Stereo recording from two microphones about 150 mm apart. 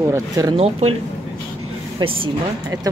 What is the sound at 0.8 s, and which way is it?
Speech, 45° right (ahead or behind).